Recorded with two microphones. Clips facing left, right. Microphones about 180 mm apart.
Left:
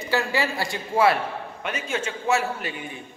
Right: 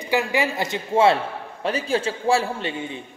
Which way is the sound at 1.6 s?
35° right (ahead or behind).